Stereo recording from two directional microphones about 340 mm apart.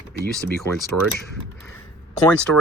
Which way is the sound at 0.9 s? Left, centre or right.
Right.